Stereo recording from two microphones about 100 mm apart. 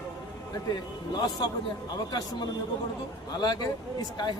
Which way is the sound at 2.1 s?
45° left (ahead or behind).